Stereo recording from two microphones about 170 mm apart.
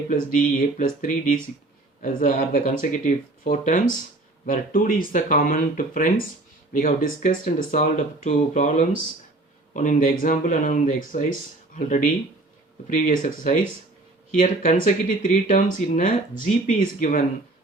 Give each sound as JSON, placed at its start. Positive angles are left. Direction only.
{"t": 0.1, "sound": "speech", "side_deg": 50}